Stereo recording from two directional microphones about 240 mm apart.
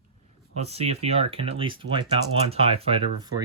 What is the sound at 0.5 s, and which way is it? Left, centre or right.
Speech, right.